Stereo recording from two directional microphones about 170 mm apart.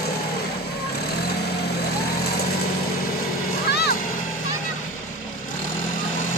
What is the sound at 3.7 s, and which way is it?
Music, 65° left (ahead or behind).